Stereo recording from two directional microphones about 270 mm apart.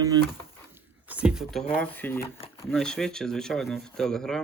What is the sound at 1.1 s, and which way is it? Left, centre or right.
Speech, centre.